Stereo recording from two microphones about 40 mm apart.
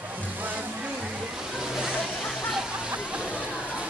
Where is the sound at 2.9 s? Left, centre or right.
Right.